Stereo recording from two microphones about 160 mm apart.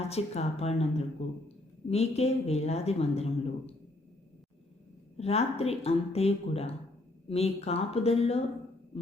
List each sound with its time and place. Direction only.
0.1 s speech: 40° left (ahead or behind)
5.1 s speech: 40° left (ahead or behind)